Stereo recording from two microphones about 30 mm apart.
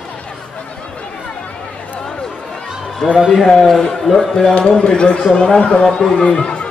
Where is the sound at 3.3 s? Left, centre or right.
Centre.